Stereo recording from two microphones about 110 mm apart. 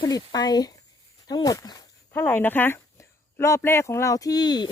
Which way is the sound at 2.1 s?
20° left (ahead or behind).